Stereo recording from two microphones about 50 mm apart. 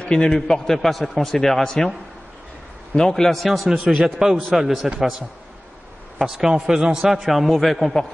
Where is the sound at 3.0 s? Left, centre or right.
Centre.